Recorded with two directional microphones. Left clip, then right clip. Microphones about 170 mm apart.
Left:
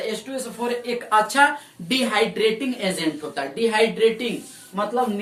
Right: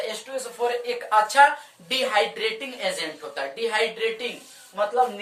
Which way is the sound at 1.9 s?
10° left (ahead or behind).